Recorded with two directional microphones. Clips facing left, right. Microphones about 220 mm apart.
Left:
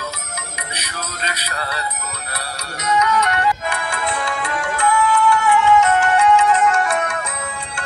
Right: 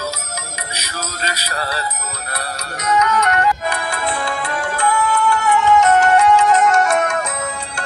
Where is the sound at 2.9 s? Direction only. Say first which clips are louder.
Right 2 dB; 45° right (ahead or behind).